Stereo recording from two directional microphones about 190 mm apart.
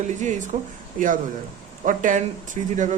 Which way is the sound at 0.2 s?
40° right (ahead or behind).